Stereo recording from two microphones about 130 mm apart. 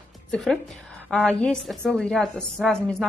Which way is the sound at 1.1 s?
5° left (ahead or behind).